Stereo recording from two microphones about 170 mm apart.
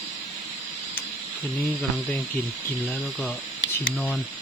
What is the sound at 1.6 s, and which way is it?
Speech, 5° left (ahead or behind).